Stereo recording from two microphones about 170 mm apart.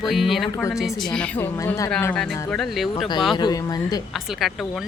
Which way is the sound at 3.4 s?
25° left (ahead or behind).